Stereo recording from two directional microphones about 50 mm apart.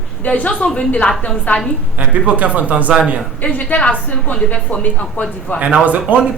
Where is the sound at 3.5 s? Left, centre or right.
Left.